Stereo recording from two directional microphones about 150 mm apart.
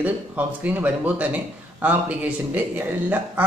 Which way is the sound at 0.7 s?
10° right (ahead or behind).